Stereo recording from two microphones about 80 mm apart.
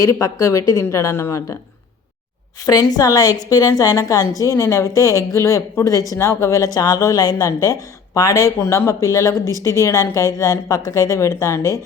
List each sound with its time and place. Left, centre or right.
0.0 s a woman's voice: left
2.6 s a woman's voice: left
6.7 s speech: left
9.4 s speech: right
9.6 s a woman's voice: left